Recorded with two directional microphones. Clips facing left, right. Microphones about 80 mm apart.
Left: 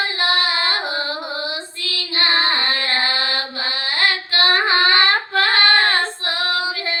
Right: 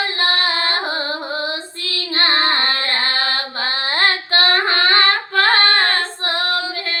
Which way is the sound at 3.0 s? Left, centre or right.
Right.